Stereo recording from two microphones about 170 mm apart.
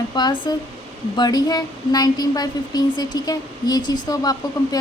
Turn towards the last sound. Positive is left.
turn(degrees=20)  # may be behind; listen again after turning